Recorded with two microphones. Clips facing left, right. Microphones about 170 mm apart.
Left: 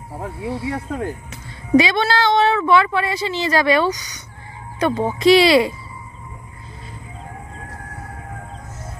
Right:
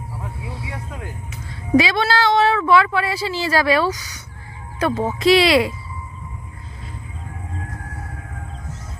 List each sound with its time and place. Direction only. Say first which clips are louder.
0.5 s speech: left 12 dB; 30° left (ahead or behind)
0.7 s speech: left 8 dB; 45° left (ahead or behind)
1.7 s speech: left 1 dB; centre (ahead or behind)